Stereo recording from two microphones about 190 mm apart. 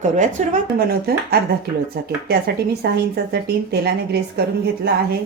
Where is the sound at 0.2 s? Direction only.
40° right (ahead or behind).